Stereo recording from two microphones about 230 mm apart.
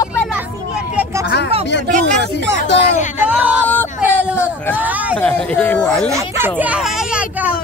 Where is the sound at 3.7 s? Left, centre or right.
Centre.